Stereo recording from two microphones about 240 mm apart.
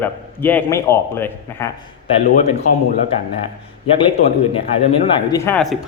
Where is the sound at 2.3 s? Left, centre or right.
Left.